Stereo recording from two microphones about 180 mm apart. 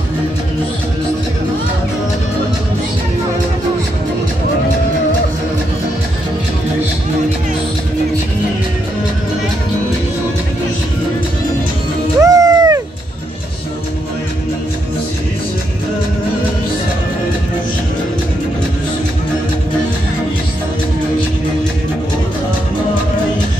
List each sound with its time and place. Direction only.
12.2 s music: 20° right (ahead or behind)